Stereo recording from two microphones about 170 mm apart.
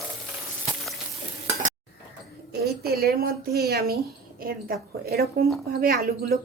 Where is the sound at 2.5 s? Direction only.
70° right (ahead or behind).